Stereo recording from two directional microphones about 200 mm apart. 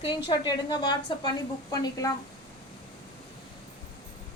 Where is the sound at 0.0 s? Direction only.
25° left (ahead or behind).